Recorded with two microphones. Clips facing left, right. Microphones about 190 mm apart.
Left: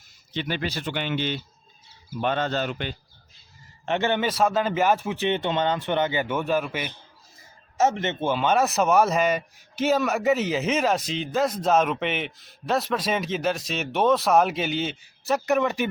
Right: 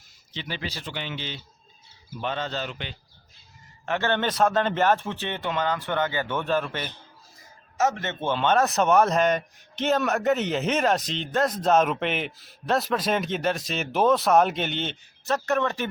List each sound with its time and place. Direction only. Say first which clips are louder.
0.3 s speech: left 6 dB; 55° left (ahead or behind)
3.8 s a man's voice: left 1 dB; 20° left (ahead or behind)
7.8 s a man's voice: left 3 dB; 25° left (ahead or behind)
8.2 s speech: even; 10° left (ahead or behind)